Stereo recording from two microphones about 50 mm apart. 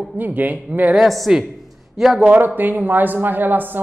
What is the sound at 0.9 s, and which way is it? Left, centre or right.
Speech, centre.